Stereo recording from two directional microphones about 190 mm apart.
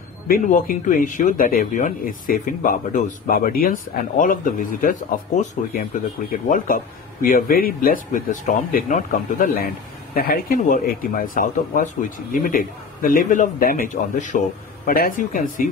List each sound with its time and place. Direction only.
0.3 s speech: 45° left (ahead or behind)